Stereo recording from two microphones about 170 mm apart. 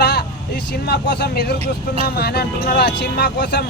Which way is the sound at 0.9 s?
70° left (ahead or behind).